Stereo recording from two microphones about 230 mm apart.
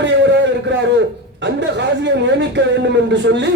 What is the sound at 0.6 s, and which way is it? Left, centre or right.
A man's voice, right.